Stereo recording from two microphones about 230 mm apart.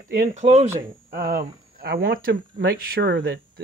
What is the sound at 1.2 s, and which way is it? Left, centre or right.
Speech, right.